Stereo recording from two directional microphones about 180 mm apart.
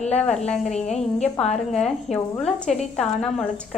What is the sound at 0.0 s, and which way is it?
Speech, 40° left (ahead or behind).